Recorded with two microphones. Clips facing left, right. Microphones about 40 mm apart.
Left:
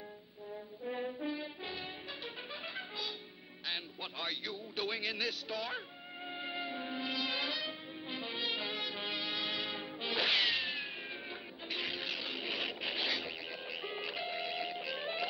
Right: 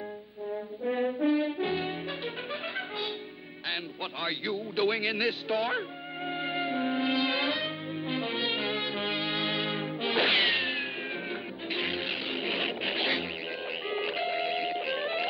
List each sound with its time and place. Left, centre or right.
0.5 s brass instrument: right
3.6 s music: right